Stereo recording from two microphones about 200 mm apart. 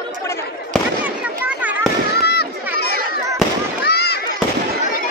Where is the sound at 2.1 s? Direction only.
55° left (ahead or behind).